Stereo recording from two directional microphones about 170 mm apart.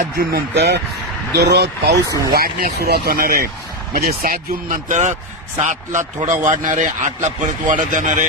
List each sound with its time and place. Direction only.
0.2 s speech: 70° right (ahead or behind)
1.4 s speech: 70° right (ahead or behind)
2.3 s speech: 65° right (ahead or behind); by 8.3 s 45° right (ahead or behind)